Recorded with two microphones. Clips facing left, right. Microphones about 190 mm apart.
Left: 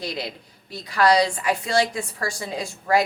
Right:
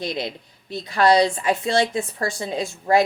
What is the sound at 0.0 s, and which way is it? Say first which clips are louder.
A woman's voice: right 3 dB; 20° right (ahead or behind).